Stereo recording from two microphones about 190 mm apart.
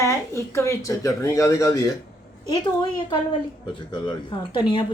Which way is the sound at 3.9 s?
25° left (ahead or behind).